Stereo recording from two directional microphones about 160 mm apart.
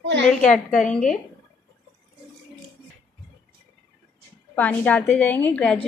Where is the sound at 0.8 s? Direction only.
50° left (ahead or behind).